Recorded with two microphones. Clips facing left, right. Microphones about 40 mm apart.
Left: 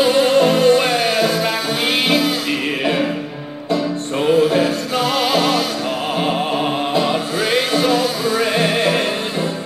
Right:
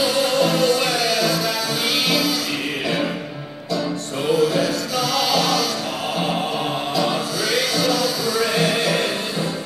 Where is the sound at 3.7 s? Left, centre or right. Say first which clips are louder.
Left 4 dB; left.